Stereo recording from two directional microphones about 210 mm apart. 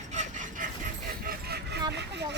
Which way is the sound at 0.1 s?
35° right (ahead or behind).